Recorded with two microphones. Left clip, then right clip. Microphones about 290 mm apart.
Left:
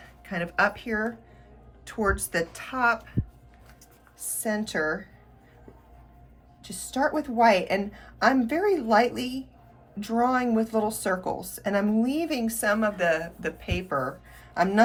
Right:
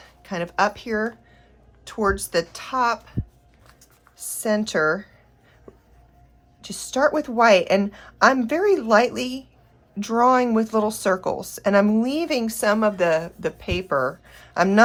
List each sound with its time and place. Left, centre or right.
0.2 s speech: centre
4.4 s speech: centre
6.6 s speech: right